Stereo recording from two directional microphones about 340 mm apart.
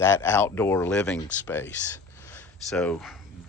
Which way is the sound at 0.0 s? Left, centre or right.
Centre.